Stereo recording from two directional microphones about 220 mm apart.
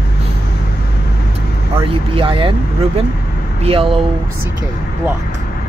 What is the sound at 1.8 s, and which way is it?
Speech, 25° right (ahead or behind).